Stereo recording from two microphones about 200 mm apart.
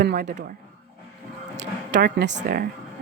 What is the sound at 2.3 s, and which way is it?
Speech, 50° right (ahead or behind).